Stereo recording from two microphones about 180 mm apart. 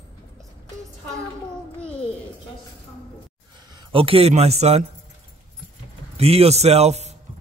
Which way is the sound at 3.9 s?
30° right (ahead or behind).